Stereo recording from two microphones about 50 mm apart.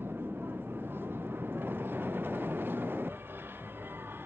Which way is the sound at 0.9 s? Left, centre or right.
Right.